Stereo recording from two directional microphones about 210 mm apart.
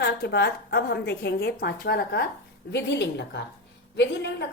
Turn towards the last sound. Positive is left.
turn(degrees=55)  # may be behind; listen again after turning